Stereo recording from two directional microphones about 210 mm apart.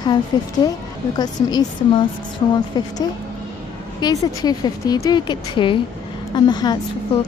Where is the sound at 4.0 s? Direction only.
20° left (ahead or behind).